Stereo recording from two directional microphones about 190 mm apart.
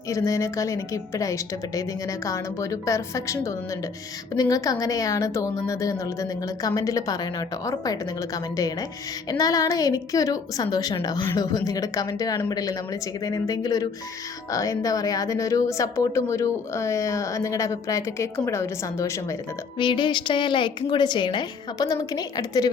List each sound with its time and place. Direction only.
0.1 s a woman's voice: 15° left (ahead or behind)